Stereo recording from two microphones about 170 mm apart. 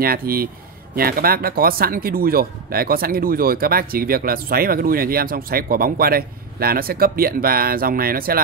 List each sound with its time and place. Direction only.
0.0 s speech: 60° right (ahead or behind)